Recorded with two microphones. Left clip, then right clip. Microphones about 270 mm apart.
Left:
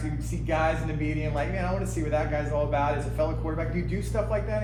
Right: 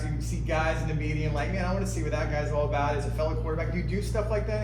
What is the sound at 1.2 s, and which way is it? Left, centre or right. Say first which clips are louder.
Speech: even; left.